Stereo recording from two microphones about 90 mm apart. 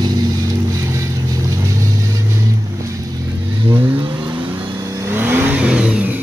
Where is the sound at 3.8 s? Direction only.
25° right (ahead or behind).